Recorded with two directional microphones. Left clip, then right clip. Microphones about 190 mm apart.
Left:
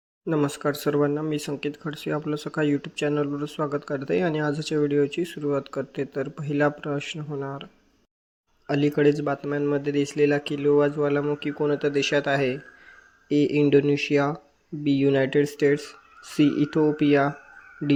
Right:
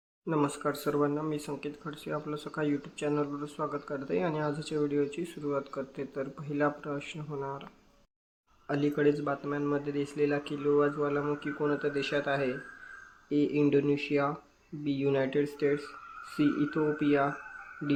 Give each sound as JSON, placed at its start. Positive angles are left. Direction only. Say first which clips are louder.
{"t": 0.3, "sound": "speech", "louder": "left 5 dB", "side_deg": 30}